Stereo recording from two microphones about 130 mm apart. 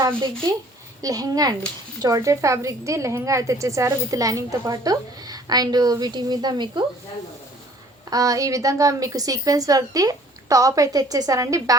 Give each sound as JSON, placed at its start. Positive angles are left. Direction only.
{"t": 1.0, "sound": "a woman's voice", "side_deg": -30}
{"t": 8.1, "sound": "a woman's voice", "side_deg": -25}